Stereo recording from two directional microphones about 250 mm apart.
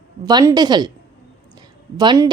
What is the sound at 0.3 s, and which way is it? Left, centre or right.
Speech, centre.